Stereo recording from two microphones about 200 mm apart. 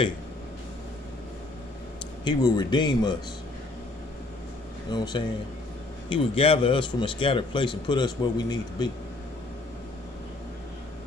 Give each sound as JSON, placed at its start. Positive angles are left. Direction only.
{"t": 2.2, "sound": "speech", "side_deg": 20}
{"t": 4.9, "sound": "speech", "side_deg": 20}